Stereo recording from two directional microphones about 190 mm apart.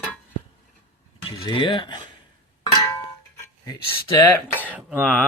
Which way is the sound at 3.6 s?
20° left (ahead or behind).